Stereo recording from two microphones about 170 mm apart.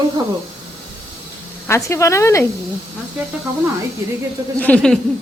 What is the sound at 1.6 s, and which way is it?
Speech, 15° left (ahead or behind).